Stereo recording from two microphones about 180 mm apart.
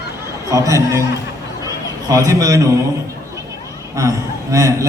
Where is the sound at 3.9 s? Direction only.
15° right (ahead or behind).